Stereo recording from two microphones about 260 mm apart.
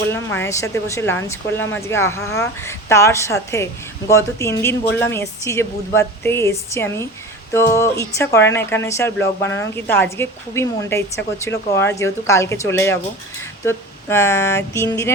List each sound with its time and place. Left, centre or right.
0.1 s speech: centre